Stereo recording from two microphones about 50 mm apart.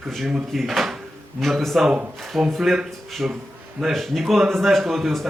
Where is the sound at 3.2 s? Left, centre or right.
Right.